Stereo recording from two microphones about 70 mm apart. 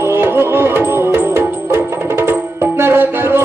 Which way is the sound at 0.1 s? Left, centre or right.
Right.